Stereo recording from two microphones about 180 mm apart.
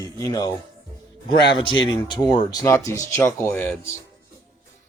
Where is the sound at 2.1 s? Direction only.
20° left (ahead or behind).